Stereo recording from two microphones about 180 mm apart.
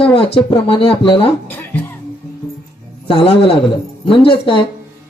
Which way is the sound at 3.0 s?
30° left (ahead or behind).